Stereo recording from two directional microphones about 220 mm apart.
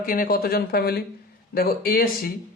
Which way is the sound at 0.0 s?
40° left (ahead or behind).